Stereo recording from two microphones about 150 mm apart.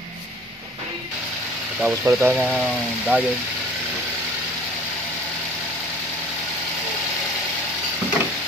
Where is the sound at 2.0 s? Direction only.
15° right (ahead or behind).